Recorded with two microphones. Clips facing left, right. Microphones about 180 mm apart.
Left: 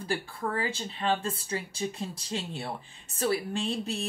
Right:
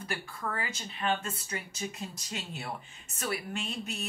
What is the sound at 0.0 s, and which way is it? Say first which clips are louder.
Speech: left 5 dB; 30° left (ahead or behind).